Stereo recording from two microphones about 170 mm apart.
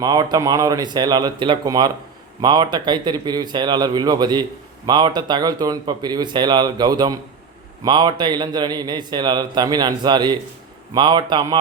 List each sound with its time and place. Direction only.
0.0 s a man's voice: 20° right (ahead or behind)